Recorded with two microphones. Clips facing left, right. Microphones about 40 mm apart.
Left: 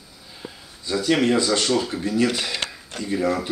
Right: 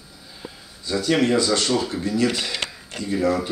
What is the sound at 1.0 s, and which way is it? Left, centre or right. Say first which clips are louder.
Speech: even; centre.